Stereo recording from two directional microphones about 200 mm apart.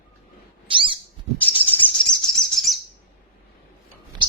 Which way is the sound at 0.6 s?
25° right (ahead or behind).